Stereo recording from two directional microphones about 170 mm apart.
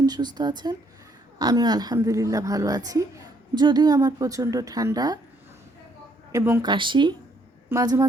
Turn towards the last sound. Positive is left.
turn(degrees=-20)  # may be behind; listen again after turning